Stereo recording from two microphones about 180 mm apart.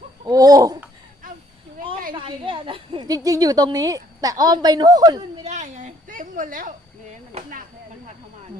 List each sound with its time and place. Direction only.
0.3 s a woman's voice: 20° right (ahead or behind)
2.1 s a woman's voice: 30° right (ahead or behind)
5.5 s a woman's voice: 40° right (ahead or behind)
7.3 s speech: 35° right (ahead or behind)